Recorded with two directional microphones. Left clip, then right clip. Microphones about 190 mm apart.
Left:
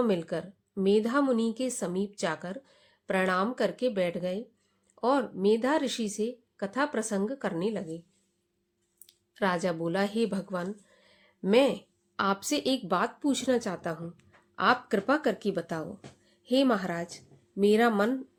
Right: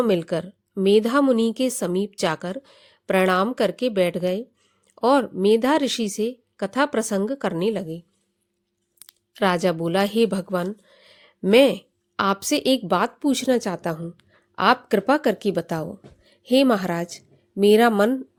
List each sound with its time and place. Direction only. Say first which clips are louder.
0.0 s a woman's voice: right 7 dB; 50° right (ahead or behind)
9.0 s a woman's voice: right 8 dB; 45° right (ahead or behind)